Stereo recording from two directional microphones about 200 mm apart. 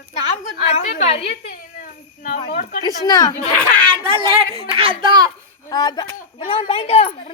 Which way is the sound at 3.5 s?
5° left (ahead or behind).